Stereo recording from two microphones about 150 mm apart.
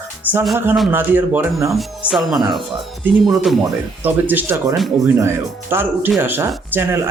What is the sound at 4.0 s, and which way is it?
Speech, 10° right (ahead or behind).